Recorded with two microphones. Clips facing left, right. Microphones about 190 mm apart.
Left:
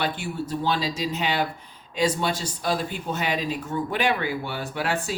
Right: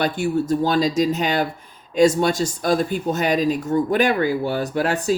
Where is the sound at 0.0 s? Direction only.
45° right (ahead or behind).